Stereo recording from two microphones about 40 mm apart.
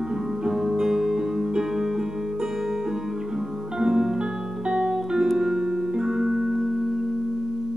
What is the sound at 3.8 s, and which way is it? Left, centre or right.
Music, centre.